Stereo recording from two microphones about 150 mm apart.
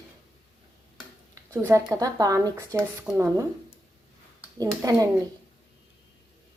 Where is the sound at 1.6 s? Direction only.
20° right (ahead or behind).